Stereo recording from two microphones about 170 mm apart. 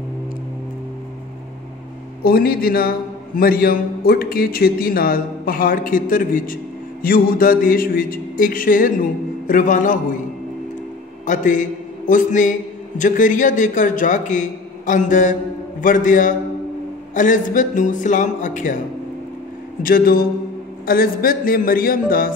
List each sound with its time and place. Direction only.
2.2 s a man's voice: 60° left (ahead or behind)
11.2 s a man's voice: 50° left (ahead or behind)
19.8 s a man's voice: 60° left (ahead or behind)